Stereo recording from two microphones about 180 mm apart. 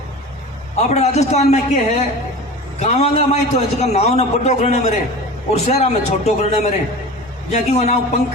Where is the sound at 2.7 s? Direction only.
35° left (ahead or behind).